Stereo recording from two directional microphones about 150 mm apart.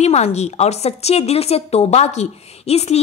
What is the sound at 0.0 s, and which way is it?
A woman's voice, 45° left (ahead or behind).